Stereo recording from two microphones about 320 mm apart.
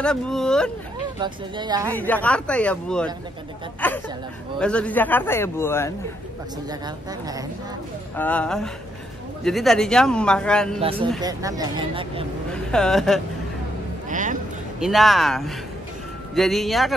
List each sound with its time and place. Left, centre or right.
0.0 s a man's voice: centre
1.2 s speech: centre
2.0 s a man's voice: centre
6.7 s speech: centre
8.2 s a man's voice: centre
10.8 s speech: centre
12.4 s speech: centre
14.0 s speech: right
14.8 s a man's voice: centre